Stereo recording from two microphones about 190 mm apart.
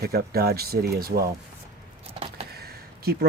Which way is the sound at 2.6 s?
55° right (ahead or behind).